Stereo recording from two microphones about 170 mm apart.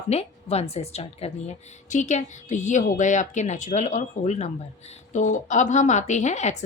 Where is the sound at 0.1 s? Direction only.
35° left (ahead or behind).